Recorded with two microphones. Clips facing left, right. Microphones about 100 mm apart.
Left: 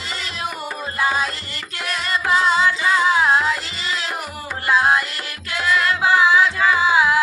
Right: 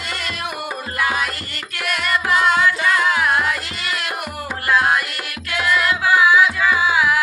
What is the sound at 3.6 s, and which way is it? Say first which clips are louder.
Music: right 1 dB; 55° right (ahead or behind).